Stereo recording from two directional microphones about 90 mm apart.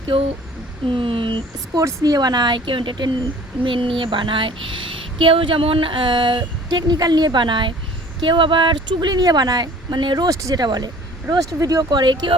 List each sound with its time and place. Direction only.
0.1 s a woman's voice: 65° right (ahead or behind)
0.9 s speech: 75° right (ahead or behind)
1.7 s speech: 40° right (ahead or behind)
2.1 s a woman's voice: 50° right (ahead or behind)
10.2 s speech: 40° right (ahead or behind); by 12.3 s 55° right (ahead or behind)